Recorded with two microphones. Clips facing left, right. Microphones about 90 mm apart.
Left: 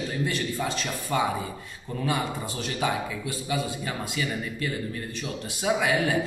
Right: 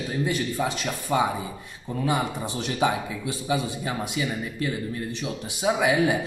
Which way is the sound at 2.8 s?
20° right (ahead or behind).